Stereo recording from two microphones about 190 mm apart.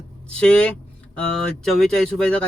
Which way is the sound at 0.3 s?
5° left (ahead or behind).